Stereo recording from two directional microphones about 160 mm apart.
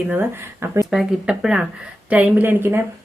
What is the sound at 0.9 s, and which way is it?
Speech, 5° right (ahead or behind).